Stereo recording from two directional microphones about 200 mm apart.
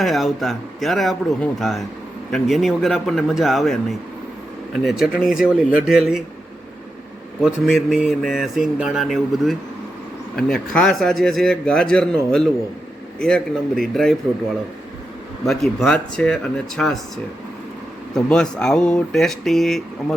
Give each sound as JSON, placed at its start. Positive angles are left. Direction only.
{"t": 0.0, "sound": "a man's voice", "side_deg": 0}
{"t": 7.7, "sound": "a man's voice", "side_deg": 0}
{"t": 15.4, "sound": "a man's voice", "side_deg": 0}
{"t": 18.1, "sound": "a man's voice", "side_deg": 5}